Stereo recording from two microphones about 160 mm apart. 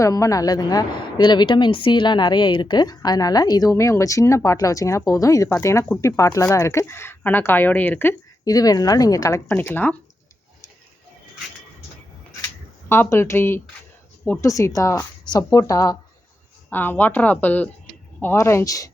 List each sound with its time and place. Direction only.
0.0 s a woman's voice: 20° left (ahead or behind)
12.9 s a woman's voice: 15° left (ahead or behind)